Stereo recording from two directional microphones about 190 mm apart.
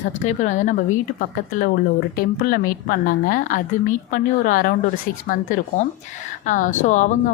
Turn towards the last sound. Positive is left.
turn(degrees=40)  # may be behind; listen again after turning